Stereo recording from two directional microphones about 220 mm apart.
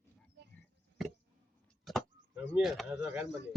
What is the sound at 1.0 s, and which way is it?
Chop, centre (ahead or behind).